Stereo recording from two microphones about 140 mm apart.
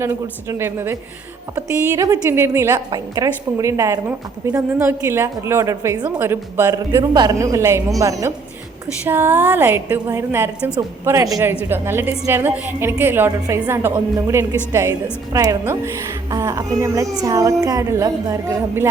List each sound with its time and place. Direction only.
0.0 s a woman's voice: 20° right (ahead or behind)